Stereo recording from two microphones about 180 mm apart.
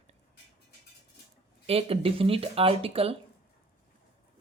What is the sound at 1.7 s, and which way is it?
Speech, 30° right (ahead or behind).